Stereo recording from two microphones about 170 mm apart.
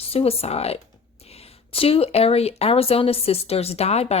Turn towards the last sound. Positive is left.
turn(degrees=40)  # may be behind; listen again after turning